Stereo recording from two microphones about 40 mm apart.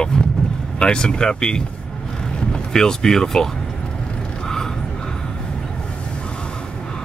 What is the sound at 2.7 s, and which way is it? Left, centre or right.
Speech, centre.